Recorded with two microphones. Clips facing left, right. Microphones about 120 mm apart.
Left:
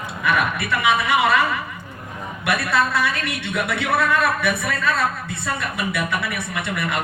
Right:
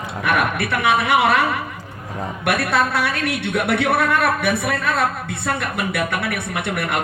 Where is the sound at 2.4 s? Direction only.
60° right (ahead or behind).